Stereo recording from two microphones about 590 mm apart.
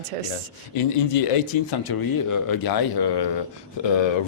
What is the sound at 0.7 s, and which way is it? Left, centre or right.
Speech, left.